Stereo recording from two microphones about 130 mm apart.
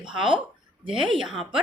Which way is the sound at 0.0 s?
40° right (ahead or behind).